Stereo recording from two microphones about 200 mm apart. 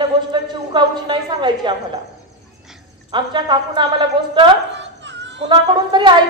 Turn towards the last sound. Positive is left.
turn(degrees=-25)  # may be behind; listen again after turning